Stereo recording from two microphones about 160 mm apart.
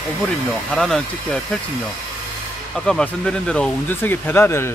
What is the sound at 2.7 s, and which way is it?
Speech, 5° left (ahead or behind).